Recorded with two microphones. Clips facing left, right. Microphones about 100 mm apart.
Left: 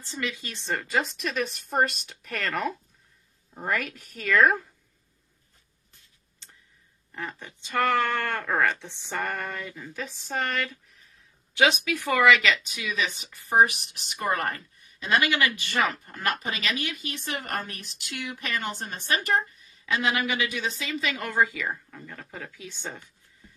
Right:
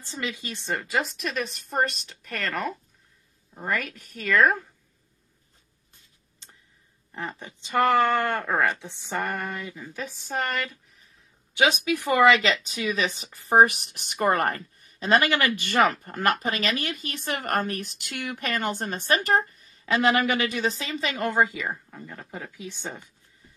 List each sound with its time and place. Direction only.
0.0 s speech: 20° right (ahead or behind)
0.7 s speech: 5° right (ahead or behind)
7.2 s speech: 20° right (ahead or behind)
10.0 s speech: centre (ahead or behind)
12.1 s a woman's voice: 25° right (ahead or behind)